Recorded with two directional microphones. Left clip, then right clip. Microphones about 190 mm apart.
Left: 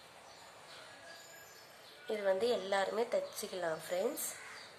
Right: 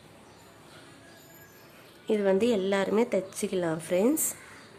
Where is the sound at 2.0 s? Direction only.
30° right (ahead or behind).